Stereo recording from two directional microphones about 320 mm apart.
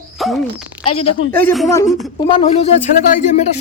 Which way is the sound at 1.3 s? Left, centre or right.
Centre.